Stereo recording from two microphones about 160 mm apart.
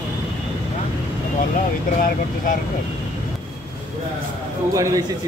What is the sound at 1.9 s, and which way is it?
Speech, 60° left (ahead or behind).